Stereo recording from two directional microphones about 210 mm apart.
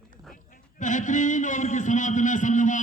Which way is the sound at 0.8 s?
35° left (ahead or behind).